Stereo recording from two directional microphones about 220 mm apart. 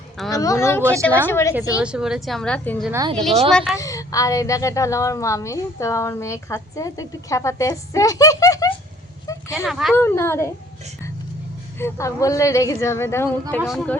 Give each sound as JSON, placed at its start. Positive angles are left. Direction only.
{"t": 0.3, "sound": "a woman's voice", "side_deg": 15}
{"t": 1.8, "sound": "a woman's voice", "side_deg": -5}
{"t": 2.9, "sound": "speech", "side_deg": -15}
{"t": 3.5, "sound": "a woman's voice", "side_deg": 0}
{"t": 3.8, "sound": "a woman's voice", "side_deg": 15}
{"t": 9.2, "sound": "a sound", "side_deg": 15}
{"t": 9.6, "sound": "a woman's voice", "side_deg": 0}
{"t": 9.9, "sound": "a woman's voice", "side_deg": 10}
{"t": 11.8, "sound": "a woman's voice", "side_deg": 15}
{"t": 13.6, "sound": "a woman's voice", "side_deg": 0}